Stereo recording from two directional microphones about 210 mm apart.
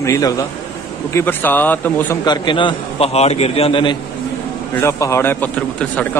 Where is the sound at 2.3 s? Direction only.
20° left (ahead or behind).